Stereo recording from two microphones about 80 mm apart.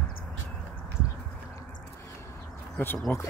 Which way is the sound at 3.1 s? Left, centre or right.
Left.